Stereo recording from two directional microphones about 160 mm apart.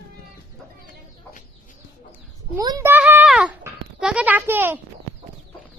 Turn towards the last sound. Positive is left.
turn(degrees=-15)  # may be behind; listen again after turning